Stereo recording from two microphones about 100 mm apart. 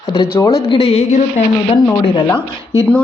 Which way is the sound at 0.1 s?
35° left (ahead or behind).